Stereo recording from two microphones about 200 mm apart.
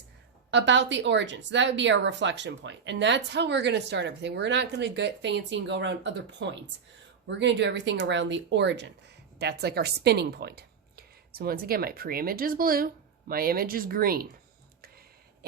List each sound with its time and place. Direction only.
0.5 s speech: 65° right (ahead or behind); by 14.3 s 50° right (ahead or behind)